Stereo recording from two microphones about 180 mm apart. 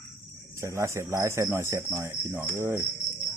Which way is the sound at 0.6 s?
15° right (ahead or behind).